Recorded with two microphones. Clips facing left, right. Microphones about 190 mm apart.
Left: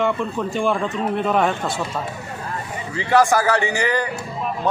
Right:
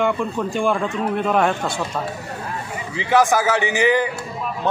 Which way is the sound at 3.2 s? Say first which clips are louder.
Even; centre (ahead or behind).